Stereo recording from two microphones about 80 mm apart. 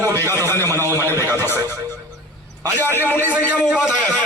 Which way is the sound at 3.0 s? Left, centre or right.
Left.